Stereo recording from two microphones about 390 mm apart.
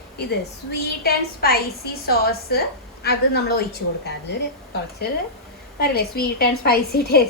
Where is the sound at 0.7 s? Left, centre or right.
Left.